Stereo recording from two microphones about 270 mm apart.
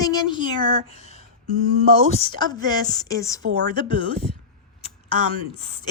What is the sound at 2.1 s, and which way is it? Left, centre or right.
Speech, centre.